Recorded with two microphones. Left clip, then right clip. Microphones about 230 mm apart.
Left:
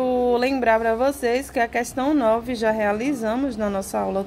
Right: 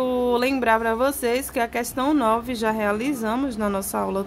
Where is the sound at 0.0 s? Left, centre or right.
Centre.